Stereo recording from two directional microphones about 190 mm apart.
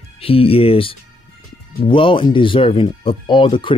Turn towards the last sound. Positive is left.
turn(degrees=25)  # may be behind; listen again after turning